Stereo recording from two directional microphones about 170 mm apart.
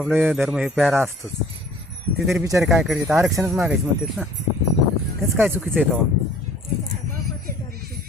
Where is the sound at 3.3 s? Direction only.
15° right (ahead or behind).